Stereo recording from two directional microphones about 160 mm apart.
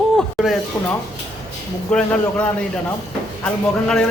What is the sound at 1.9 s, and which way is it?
A man's voice, 5° left (ahead or behind).